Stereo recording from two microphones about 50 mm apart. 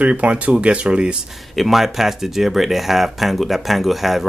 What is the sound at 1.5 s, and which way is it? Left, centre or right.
Speech, centre.